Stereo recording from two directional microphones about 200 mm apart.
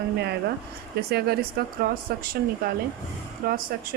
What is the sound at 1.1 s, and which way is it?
A woman's voice, 50° right (ahead or behind).